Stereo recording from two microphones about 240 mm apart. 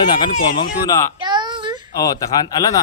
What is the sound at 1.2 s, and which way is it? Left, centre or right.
Child singing, centre.